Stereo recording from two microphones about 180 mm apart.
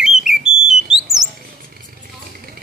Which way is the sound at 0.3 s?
50° right (ahead or behind).